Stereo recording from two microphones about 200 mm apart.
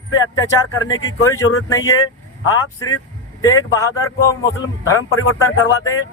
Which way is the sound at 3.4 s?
15° left (ahead or behind).